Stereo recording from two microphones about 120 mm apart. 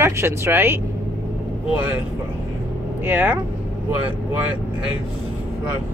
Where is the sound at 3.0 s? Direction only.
15° right (ahead or behind).